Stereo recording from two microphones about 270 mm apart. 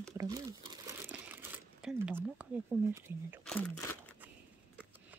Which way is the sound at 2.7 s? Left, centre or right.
Centre.